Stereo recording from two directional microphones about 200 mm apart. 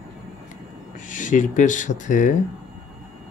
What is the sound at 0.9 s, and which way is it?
Speech, 40° left (ahead or behind).